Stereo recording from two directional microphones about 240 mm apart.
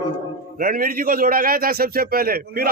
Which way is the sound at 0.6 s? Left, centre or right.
Right.